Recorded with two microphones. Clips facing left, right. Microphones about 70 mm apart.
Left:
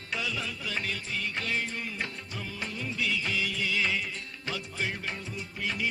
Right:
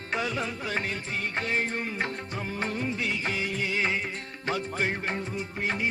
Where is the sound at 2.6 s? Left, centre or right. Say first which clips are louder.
Right 3 dB; right.